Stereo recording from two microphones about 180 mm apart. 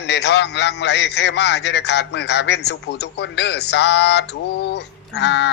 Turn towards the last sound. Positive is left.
turn(degrees=75)  # may be behind; listen again after turning